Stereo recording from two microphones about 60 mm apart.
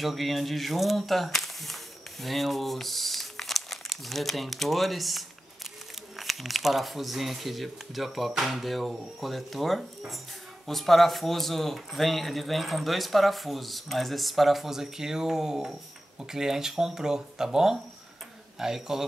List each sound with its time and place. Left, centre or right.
0.0 s a man's voice: centre